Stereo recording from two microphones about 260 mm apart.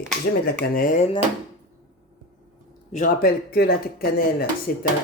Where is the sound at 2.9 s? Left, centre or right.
Left.